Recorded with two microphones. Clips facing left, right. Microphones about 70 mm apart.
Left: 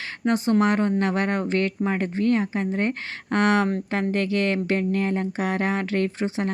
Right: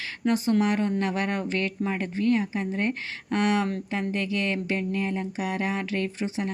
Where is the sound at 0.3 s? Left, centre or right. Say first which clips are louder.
Left 2 dB; left.